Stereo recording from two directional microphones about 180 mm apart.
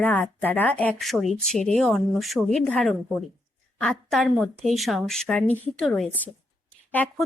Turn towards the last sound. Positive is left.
turn(degrees=10)  # may be behind; listen again after turning